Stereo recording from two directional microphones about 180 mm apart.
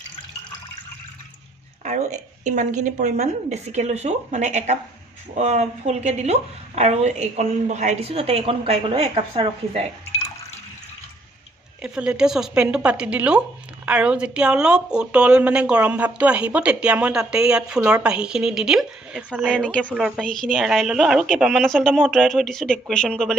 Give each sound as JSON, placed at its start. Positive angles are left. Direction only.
{"t": 1.8, "sound": "a woman's voice", "side_deg": -40}
{"t": 11.8, "sound": "a woman's voice", "side_deg": -5}